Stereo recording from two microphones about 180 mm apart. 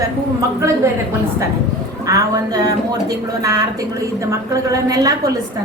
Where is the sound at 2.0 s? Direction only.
20° right (ahead or behind).